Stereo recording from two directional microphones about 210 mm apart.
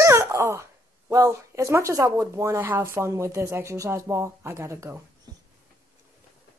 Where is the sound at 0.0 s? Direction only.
15° right (ahead or behind).